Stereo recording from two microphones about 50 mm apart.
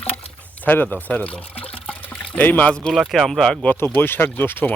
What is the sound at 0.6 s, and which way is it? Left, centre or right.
Speech, left.